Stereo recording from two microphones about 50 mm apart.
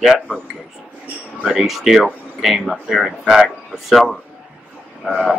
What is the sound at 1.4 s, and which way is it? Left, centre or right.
Speech, centre.